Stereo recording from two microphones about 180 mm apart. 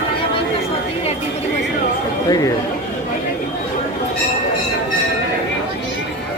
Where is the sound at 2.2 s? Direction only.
20° left (ahead or behind).